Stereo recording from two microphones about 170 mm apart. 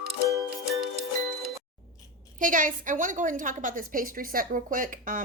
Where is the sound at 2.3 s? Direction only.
50° right (ahead or behind).